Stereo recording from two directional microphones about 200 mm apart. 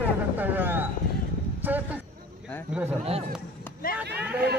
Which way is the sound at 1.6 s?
10° right (ahead or behind).